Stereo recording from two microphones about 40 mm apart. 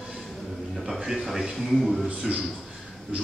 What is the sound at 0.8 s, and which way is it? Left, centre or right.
A man's voice, centre.